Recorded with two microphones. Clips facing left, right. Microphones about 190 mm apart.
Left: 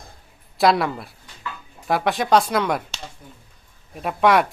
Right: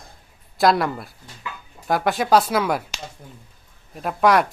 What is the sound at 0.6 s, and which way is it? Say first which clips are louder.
Speech: even; centre (ahead or behind).